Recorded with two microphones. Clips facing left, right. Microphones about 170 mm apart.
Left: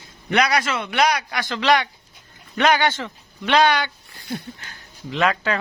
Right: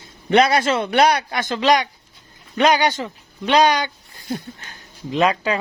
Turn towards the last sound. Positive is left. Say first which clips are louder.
# right 3 dB
turn(degrees=-15)  # may be behind; listen again after turning